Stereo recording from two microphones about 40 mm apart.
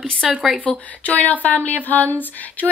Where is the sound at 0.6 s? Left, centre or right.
Left.